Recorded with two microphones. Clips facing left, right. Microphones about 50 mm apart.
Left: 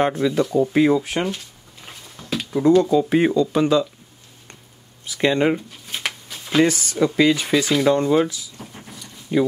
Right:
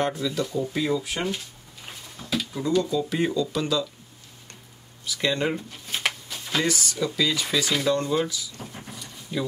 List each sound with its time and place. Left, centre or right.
0.0 s speech: left
2.3 s speech: left
5.0 s speech: left
5.7 s a sound: centre
6.5 s speech: left
8.5 s a sound: centre